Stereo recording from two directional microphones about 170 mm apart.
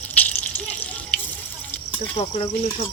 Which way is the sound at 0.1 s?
10° left (ahead or behind).